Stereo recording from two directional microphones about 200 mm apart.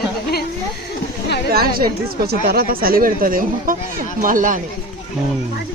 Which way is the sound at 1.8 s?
50° right (ahead or behind).